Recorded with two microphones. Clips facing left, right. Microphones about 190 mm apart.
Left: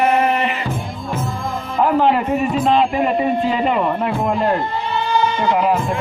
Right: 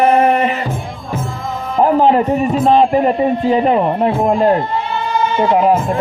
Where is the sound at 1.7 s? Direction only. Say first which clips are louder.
Right 4 dB; 40° right (ahead or behind).